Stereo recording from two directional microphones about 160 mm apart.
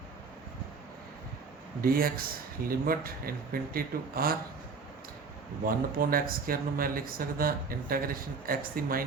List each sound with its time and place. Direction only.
1.8 s speech: 65° right (ahead or behind)
5.6 s speech: 65° right (ahead or behind)